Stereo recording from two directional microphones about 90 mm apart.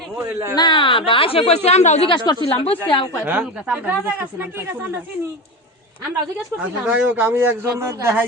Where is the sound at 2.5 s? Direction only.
90° left.